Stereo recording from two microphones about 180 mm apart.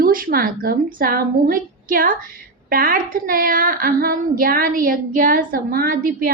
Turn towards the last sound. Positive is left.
turn(degrees=-55)  # may be behind; listen again after turning